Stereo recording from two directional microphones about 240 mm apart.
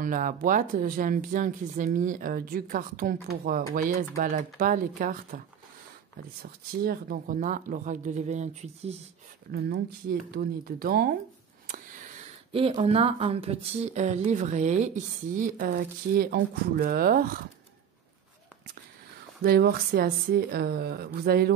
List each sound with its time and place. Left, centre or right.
0.0 s speech: right
6.4 s speech: right
10.3 s speech: right
12.5 s speech: right
19.4 s speech: right